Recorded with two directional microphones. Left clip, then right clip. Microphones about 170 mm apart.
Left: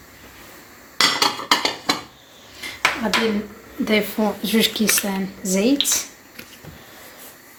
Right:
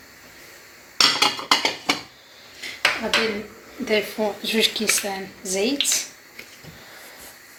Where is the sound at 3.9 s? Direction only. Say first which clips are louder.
Left 2 dB; 50° left (ahead or behind).